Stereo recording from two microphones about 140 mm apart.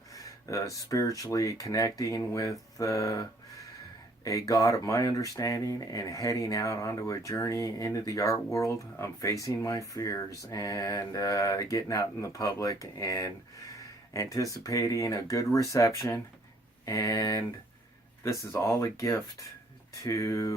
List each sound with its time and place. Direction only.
0.4 s speech: 20° left (ahead or behind)